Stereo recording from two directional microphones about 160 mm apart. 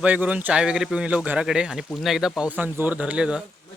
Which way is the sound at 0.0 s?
10° right (ahead or behind).